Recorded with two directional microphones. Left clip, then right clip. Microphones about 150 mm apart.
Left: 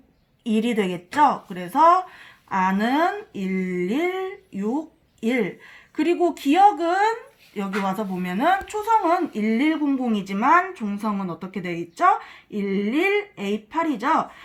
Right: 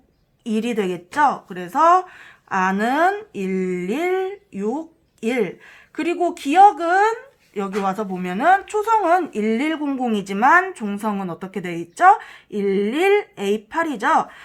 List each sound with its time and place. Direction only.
0.4 s a woman's voice: centre (ahead or behind); by 14.4 s 35° right (ahead or behind)